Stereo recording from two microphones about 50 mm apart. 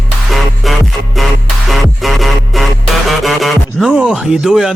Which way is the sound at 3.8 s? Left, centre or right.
Centre.